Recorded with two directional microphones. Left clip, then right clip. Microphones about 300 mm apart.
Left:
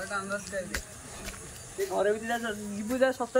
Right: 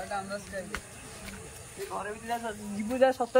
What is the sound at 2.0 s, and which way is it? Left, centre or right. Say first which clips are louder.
Speech: left 7 dB; left.